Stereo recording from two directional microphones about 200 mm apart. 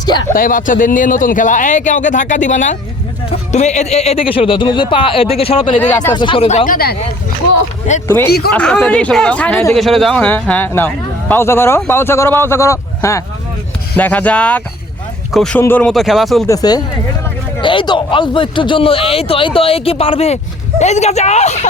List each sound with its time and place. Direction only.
0.0 s speech: 20° left (ahead or behind)
0.3 s a man's voice: 45° left (ahead or behind); by 5.8 s 25° left (ahead or behind)
5.8 s speech: 10° left (ahead or behind)
6.1 s speech: 25° left (ahead or behind)
6.7 s speech: 50° left (ahead or behind)
8.0 s speech: 10° left (ahead or behind)
8.3 s speech: 50° left (ahead or behind)
8.5 s speech: 5° left (ahead or behind)
16.5 s speech: 20° left (ahead or behind); by 21.7 s 35° left (ahead or behind)